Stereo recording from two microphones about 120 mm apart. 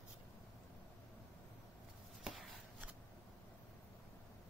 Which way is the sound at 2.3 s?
5° right (ahead or behind).